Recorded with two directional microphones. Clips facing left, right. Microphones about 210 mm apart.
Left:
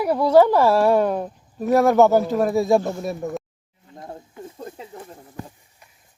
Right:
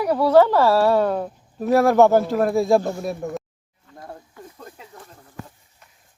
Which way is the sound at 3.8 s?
20° left (ahead or behind).